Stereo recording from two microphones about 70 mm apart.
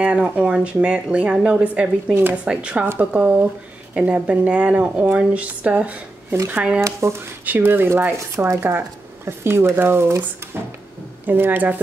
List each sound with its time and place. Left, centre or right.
0.0 s a woman's voice: centre
6.8 s speech: right
7.4 s a woman's voice: right